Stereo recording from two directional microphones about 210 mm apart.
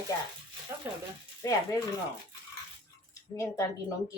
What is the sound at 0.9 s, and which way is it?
Speech, 10° right (ahead or behind).